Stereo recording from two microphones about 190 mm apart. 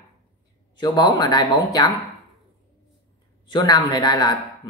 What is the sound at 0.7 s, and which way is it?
Speech, 20° left (ahead or behind).